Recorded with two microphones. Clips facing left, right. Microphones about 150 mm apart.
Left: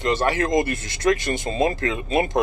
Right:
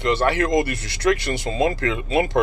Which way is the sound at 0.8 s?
45° left (ahead or behind).